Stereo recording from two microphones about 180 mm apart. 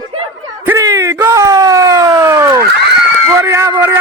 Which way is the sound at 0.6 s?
15° right (ahead or behind).